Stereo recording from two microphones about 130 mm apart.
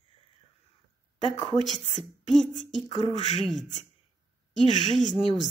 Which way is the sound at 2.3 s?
60° left (ahead or behind).